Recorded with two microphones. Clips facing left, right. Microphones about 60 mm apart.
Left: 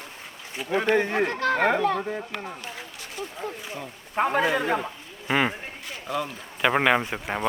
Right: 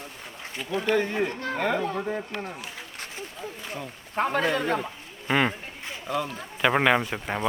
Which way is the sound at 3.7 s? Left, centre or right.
Centre.